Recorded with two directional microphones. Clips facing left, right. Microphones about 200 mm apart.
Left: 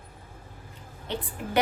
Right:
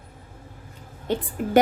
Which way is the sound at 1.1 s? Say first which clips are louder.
Right 7 dB; 45° right (ahead or behind).